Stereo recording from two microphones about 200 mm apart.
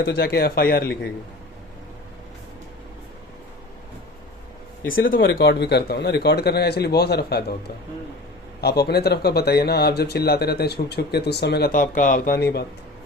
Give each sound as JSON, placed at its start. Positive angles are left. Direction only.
{"t": 0.0, "sound": "speech", "side_deg": 55}
{"t": 4.9, "sound": "speech", "side_deg": 75}
{"t": 5.1, "sound": "speech", "side_deg": 45}
{"t": 8.6, "sound": "speech", "side_deg": 55}